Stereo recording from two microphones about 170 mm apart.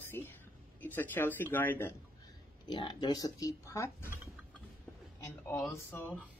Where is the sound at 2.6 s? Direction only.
25° left (ahead or behind).